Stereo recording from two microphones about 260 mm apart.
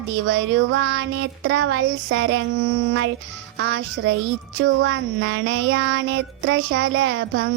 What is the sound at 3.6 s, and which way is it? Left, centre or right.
Child singing, right.